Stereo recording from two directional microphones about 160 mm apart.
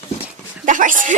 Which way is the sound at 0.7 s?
55° right (ahead or behind).